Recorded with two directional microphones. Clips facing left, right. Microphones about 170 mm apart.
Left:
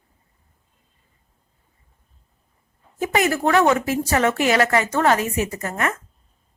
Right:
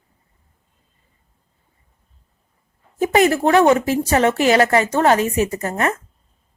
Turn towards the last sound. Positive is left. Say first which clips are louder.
# right 4 dB
turn(degrees=-30)  # may be behind; listen again after turning